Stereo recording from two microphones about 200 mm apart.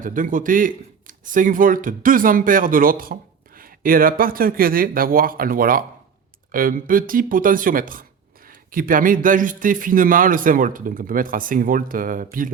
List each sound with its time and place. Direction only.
0.0 s speech: 40° right (ahead or behind)